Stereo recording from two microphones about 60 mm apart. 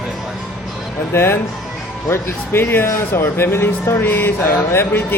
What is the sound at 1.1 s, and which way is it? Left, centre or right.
Speech, left.